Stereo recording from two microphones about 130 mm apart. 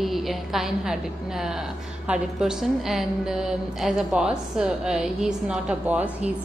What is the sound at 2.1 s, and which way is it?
A woman's voice, 5° right (ahead or behind).